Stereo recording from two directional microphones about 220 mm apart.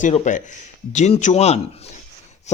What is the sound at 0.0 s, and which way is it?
A man's voice, 35° left (ahead or behind).